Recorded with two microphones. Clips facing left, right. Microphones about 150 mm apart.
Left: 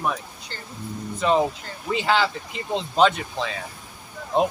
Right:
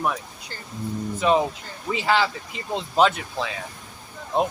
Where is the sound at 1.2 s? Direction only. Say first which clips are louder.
Even; 5° right (ahead or behind).